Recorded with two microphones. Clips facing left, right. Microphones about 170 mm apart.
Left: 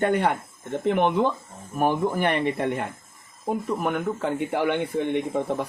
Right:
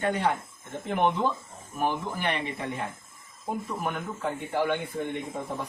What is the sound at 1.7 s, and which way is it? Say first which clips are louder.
Speech: left 7 dB; 50° left (ahead or behind).